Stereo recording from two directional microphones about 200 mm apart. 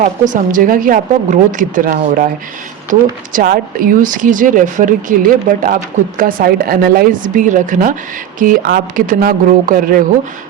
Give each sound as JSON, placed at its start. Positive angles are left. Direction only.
{"t": 0.0, "sound": "speech", "side_deg": -40}